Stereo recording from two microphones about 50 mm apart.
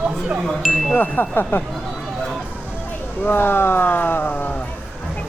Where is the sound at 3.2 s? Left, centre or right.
Left.